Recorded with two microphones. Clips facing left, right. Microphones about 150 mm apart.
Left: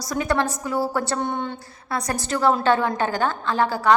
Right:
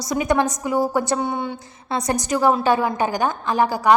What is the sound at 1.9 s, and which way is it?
A woman's voice, 20° right (ahead or behind).